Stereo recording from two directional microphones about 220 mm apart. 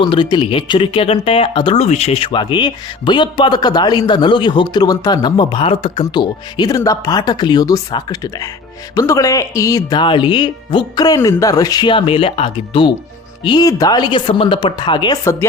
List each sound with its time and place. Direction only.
0.0 s speech: 20° left (ahead or behind)